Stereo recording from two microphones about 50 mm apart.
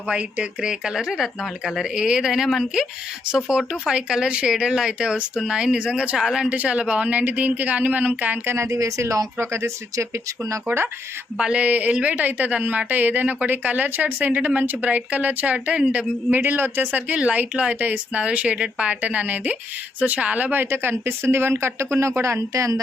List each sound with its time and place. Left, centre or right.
0.1 s speech: right
4.5 s speech: centre
6.5 s speech: right
8.4 s speech: right
11.3 s speech: right
16.3 s speech: right
17.5 s speech: right